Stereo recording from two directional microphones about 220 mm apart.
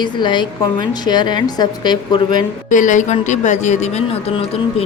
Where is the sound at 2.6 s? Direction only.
35° left (ahead or behind).